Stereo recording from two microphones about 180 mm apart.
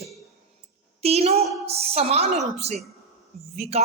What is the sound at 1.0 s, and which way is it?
A woman's voice, 35° right (ahead or behind).